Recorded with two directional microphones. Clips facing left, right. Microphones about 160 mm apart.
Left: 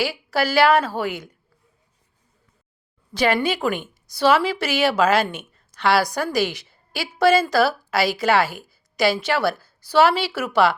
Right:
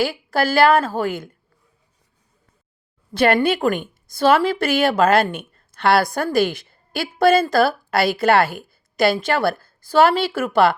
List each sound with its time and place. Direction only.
0.0 s a woman's voice: 50° right (ahead or behind)
3.2 s a woman's voice: 55° right (ahead or behind)